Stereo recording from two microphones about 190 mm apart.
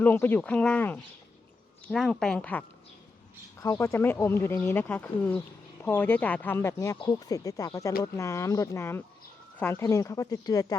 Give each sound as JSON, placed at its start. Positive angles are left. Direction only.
{"t": 0.0, "sound": "speech", "side_deg": 10}